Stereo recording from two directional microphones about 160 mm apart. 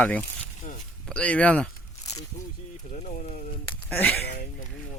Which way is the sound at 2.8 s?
50° left (ahead or behind).